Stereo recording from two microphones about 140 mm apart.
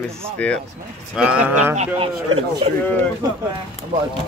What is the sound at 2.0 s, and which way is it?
Speech, 45° right (ahead or behind).